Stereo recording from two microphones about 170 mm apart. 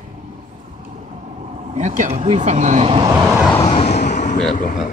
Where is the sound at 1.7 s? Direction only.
45° right (ahead or behind).